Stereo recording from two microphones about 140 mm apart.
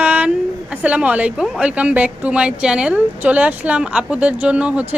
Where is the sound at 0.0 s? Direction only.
10° right (ahead or behind).